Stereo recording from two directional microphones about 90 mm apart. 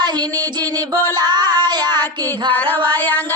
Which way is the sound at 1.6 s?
50° right (ahead or behind).